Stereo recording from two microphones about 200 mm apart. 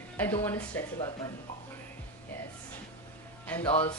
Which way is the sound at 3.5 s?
10° left (ahead or behind).